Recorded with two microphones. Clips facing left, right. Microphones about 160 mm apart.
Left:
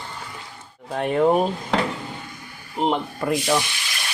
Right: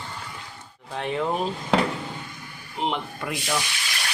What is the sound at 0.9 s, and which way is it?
Speech, 50° left (ahead or behind).